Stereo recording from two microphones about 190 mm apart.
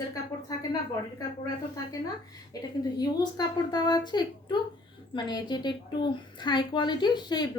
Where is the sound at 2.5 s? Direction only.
20° left (ahead or behind).